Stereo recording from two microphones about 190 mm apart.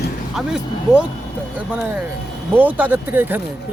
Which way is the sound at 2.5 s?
10° right (ahead or behind).